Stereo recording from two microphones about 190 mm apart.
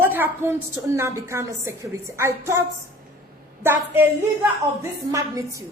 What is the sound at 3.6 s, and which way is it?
A woman's voice, 10° right (ahead or behind).